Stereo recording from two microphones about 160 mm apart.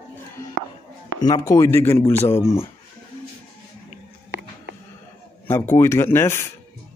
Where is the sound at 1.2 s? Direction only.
25° left (ahead or behind).